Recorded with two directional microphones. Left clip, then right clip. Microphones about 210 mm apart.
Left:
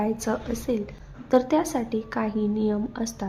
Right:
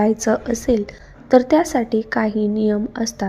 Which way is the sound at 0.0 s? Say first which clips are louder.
Right 9 dB; 25° right (ahead or behind).